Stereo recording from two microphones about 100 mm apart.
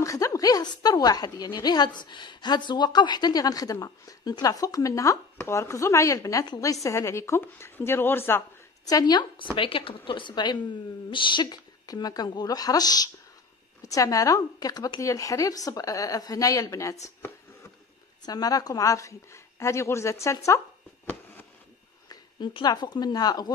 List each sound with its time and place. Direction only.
0.0 s a woman's voice: 35° left (ahead or behind)
8.8 s a woman's voice: 40° left (ahead or behind)
9.6 s a woman's voice: 60° left (ahead or behind); by 16.9 s 35° left (ahead or behind)
18.2 s a woman's voice: 40° left (ahead or behind)
22.5 s a woman's voice: 50° left (ahead or behind)